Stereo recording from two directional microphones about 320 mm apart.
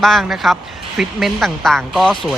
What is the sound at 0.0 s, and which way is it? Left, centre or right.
Speech, centre.